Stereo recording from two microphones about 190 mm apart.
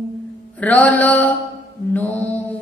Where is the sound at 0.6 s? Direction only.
10° left (ahead or behind).